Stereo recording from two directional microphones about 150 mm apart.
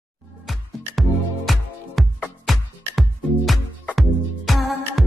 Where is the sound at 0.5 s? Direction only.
Centre (ahead or behind).